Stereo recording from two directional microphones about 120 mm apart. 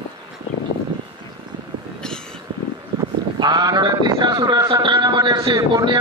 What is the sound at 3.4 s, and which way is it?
A man's voice, 35° right (ahead or behind).